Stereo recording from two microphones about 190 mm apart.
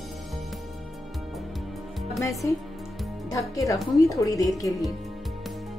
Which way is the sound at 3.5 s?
15° left (ahead or behind).